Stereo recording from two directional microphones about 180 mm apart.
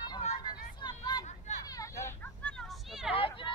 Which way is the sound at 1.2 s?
40° left (ahead or behind).